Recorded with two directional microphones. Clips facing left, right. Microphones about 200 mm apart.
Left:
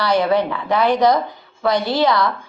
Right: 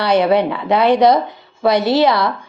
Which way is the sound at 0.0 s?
20° right (ahead or behind).